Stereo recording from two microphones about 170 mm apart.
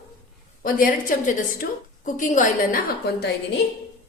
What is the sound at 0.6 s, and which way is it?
A woman's voice, 55° left (ahead or behind).